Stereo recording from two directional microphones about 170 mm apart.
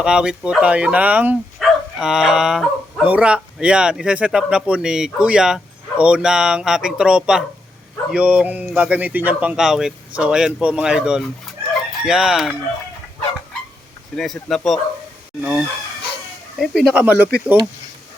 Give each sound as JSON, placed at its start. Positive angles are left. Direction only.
{"t": 0.0, "sound": "speech", "side_deg": -5}
{"t": 14.2, "sound": "speech", "side_deg": 0}